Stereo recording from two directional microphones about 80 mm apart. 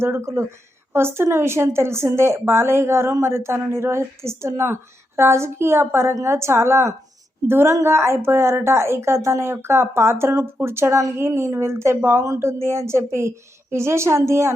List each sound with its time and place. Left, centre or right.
0.0 s a woman's voice: right